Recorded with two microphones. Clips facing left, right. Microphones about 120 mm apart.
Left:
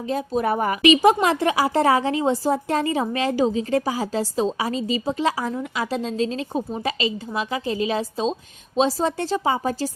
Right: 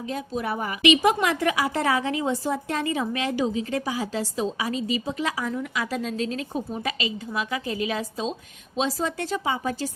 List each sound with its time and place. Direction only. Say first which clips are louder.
0.1 s a woman's voice: left 7 dB; 40° left (ahead or behind)